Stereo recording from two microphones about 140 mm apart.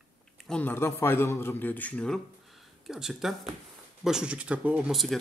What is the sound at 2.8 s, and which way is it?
Speech, 5° right (ahead or behind).